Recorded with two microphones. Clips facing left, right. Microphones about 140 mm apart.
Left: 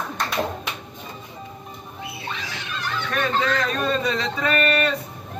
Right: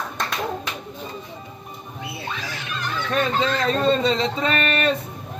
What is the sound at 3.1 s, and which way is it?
Speech, 25° right (ahead or behind).